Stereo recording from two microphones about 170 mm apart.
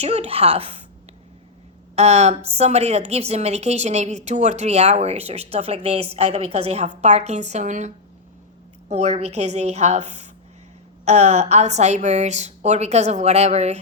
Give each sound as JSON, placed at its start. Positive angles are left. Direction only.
{"t": 0.0, "sound": "a woman's voice", "side_deg": -40}
{"t": 2.0, "sound": "a woman's voice", "side_deg": -40}